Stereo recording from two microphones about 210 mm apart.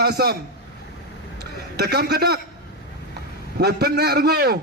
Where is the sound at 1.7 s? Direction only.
50° right (ahead or behind).